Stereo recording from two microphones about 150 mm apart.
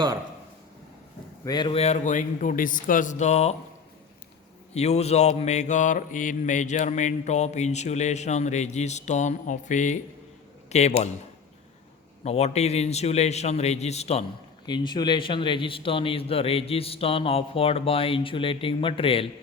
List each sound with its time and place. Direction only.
1.5 s a man's voice: 30° left (ahead or behind); by 3.5 s 50° left (ahead or behind)
4.7 s mantra: 45° left (ahead or behind)
10.7 s speech: 50° left (ahead or behind)
12.2 s mantra: 45° left (ahead or behind)
14.7 s a man's voice: 30° left (ahead or behind)